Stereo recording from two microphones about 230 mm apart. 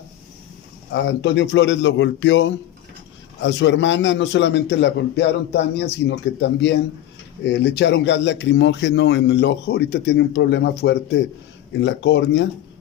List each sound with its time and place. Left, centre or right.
0.9 s a man's voice: left